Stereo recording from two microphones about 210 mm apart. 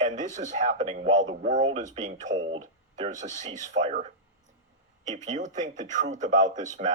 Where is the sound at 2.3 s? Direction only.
60° right (ahead or behind).